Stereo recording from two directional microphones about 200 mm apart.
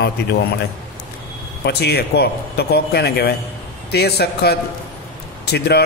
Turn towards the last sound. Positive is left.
turn(degrees=55)  # may be behind; listen again after turning